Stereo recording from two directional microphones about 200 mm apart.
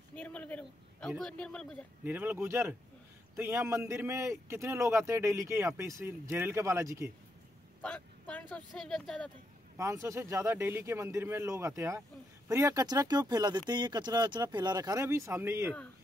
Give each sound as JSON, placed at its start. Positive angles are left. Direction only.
{"t": 0.1, "sound": "a sound", "side_deg": 5}
{"t": 2.0, "sound": "speech", "side_deg": -10}
{"t": 7.8, "sound": "speech", "side_deg": 5}
{"t": 9.8, "sound": "speech", "side_deg": -15}